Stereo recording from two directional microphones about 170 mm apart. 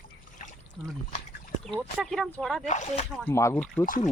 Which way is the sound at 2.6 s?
45° left (ahead or behind).